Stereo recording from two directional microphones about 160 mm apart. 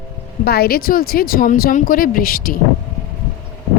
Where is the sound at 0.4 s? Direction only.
75° left (ahead or behind).